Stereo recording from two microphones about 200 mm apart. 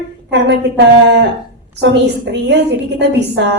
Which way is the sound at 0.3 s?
60° right (ahead or behind).